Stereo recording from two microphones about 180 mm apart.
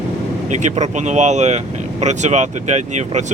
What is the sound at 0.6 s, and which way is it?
Speech, 40° right (ahead or behind).